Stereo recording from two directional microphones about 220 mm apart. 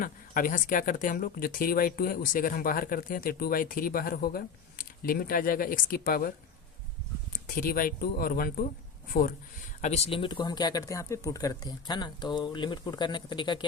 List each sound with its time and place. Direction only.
0.0 s speech: 40° left (ahead or behind)
7.4 s speech: 40° left (ahead or behind)
9.8 s speech: 30° left (ahead or behind)